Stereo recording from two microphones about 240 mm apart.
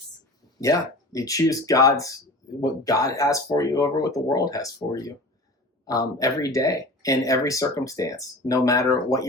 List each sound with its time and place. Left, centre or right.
0.6 s speech: centre